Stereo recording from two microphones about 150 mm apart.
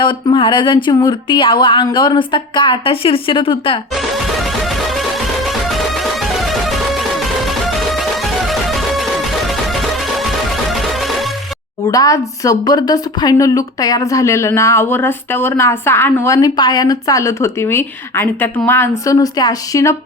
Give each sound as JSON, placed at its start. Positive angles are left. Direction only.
{"t": 0.0, "sound": "speech", "side_deg": 35}
{"t": 3.9, "sound": "music", "side_deg": 0}
{"t": 10.7, "sound": "music", "side_deg": 0}
{"t": 11.9, "sound": "a woman's voice", "side_deg": 25}